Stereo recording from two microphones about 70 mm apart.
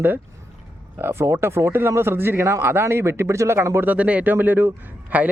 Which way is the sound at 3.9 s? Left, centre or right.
Centre.